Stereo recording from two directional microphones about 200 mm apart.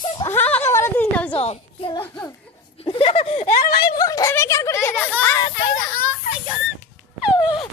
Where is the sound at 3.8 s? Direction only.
20° left (ahead or behind).